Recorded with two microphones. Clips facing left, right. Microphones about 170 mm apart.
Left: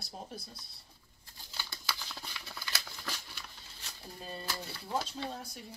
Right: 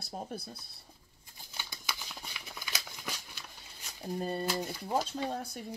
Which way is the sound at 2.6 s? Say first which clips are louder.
Even; 20° right (ahead or behind).